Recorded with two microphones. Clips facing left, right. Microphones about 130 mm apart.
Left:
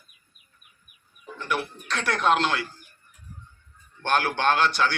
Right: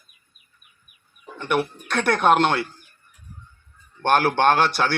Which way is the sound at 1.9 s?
60° right (ahead or behind).